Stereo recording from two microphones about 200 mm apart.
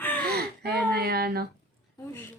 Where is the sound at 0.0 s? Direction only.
10° left (ahead or behind).